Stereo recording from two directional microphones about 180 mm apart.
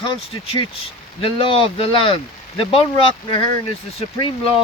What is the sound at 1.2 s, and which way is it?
Speech, 30° left (ahead or behind).